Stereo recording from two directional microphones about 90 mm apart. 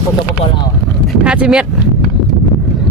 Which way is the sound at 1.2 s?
10° right (ahead or behind).